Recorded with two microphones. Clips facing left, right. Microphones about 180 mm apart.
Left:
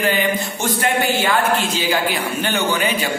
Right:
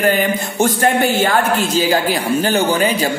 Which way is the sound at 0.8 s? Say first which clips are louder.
Right 2 dB; 40° right (ahead or behind).